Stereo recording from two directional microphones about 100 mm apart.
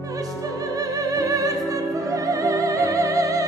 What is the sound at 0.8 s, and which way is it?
Music, 35° right (ahead or behind).